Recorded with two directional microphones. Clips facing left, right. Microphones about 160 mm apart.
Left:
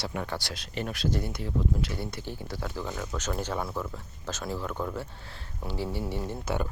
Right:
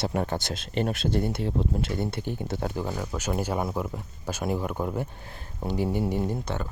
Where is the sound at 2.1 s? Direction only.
20° right (ahead or behind).